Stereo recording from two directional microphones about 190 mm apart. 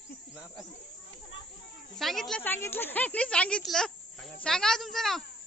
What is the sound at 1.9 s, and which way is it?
Speech, centre (ahead or behind).